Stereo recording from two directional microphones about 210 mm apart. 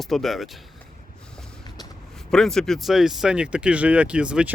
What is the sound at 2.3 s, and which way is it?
Speech, centre (ahead or behind).